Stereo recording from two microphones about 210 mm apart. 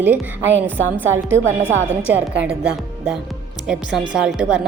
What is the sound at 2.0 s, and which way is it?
A woman's voice, 5° right (ahead or behind).